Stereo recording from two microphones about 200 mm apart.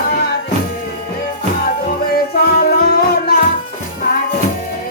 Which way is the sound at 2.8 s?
50° left (ahead or behind).